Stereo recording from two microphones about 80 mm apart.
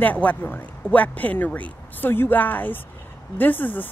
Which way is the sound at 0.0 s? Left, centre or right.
Centre.